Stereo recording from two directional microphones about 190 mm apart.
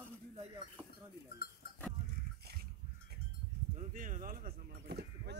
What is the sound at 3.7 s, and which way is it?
Speech, 45° right (ahead or behind).